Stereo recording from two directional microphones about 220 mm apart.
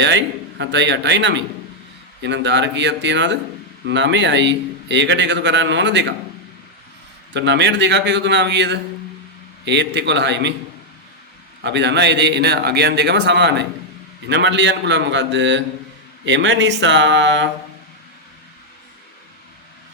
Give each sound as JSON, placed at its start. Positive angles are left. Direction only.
{"t": 0.0, "sound": "a man's voice", "side_deg": -55}
{"t": 7.3, "sound": "a man's voice", "side_deg": -55}
{"t": 11.6, "sound": "a man's voice", "side_deg": -50}